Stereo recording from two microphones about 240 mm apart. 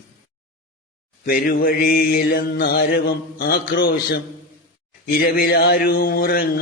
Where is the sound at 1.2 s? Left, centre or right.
Left.